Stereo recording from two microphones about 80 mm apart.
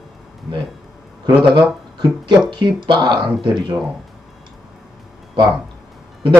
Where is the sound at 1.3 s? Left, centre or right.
Right.